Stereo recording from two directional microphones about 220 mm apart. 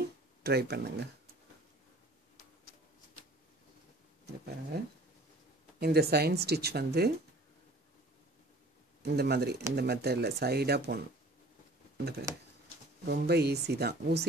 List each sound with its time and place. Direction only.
0.4 s speech: 45° right (ahead or behind)
4.7 s speech: 45° right (ahead or behind)
9.0 s speech: 45° right (ahead or behind)
12.0 s speech: 45° right (ahead or behind)